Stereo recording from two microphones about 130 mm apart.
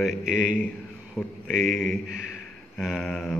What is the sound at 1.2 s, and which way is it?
Speech, 20° left (ahead or behind).